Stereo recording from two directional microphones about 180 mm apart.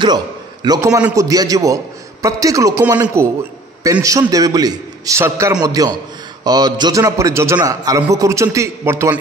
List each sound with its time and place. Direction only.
0.0 s a man's voice: 25° right (ahead or behind)